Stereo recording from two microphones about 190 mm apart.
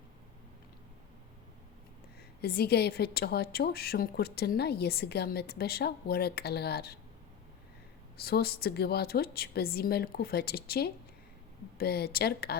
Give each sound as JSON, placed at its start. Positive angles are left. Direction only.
{"t": 2.4, "sound": "a woman's voice", "side_deg": 55}
{"t": 8.2, "sound": "a woman's voice", "side_deg": 55}